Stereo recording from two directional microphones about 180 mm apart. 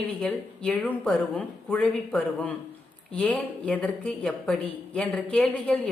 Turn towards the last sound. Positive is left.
turn(degrees=5)  # may be behind; listen again after turning